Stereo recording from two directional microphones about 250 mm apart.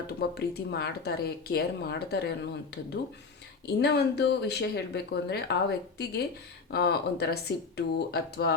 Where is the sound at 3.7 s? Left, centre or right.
Left.